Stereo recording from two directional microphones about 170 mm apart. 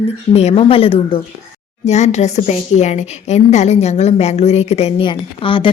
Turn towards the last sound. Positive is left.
turn(degrees=30)  # may be behind; listen again after turning